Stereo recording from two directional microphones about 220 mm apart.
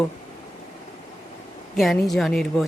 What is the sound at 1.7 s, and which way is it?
Speech, centre (ahead or behind).